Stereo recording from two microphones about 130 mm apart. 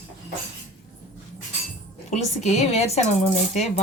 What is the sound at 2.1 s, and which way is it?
Speech, 60° left (ahead or behind).